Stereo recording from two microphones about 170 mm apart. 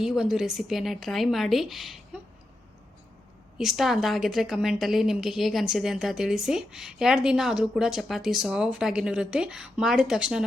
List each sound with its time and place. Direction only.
0.0 s a woman's voice: centre (ahead or behind)
3.6 s a woman's voice: centre (ahead or behind)